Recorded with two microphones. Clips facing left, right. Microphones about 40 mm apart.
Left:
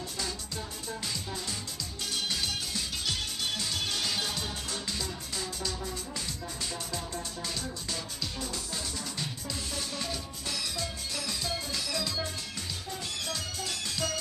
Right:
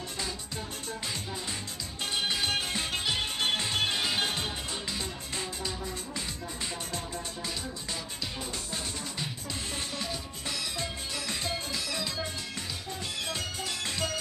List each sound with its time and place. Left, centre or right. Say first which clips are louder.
2.1 s music: right 4 dB; right
5.6 s music: even; centre
9.9 s music: even; centre
11.7 s music: even; right
13.3 s music: right 1 dB; right